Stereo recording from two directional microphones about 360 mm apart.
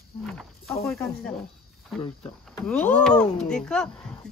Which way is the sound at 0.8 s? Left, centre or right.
Centre.